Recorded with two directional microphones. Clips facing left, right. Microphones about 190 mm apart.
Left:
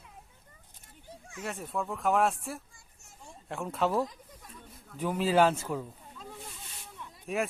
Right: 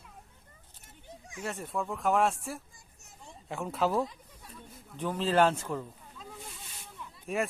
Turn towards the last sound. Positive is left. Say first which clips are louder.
# even
turn(degrees=0)  # may be behind; listen again after turning